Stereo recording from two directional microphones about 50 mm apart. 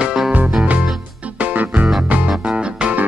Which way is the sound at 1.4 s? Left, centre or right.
Right.